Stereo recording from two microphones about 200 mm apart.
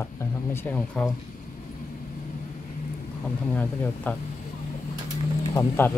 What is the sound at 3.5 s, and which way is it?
Speech, 10° left (ahead or behind).